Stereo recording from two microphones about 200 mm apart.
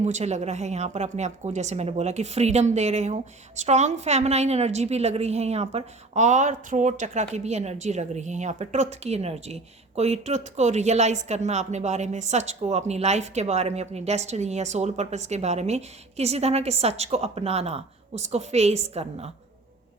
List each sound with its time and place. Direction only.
0.0 s a woman's voice: 35° right (ahead or behind)